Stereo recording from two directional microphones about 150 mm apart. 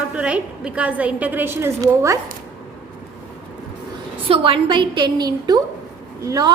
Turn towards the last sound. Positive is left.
turn(degrees=-25)  # may be behind; listen again after turning